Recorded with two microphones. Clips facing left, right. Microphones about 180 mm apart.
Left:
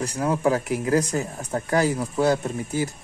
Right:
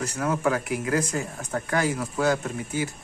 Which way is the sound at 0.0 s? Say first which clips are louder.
Left 3 dB; 30° left (ahead or behind).